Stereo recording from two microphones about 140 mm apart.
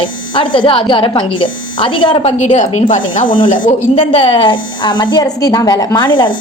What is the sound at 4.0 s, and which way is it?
A woman's voice, 40° left (ahead or behind).